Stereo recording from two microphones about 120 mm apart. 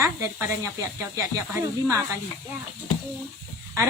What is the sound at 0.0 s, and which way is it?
Speech, 25° right (ahead or behind).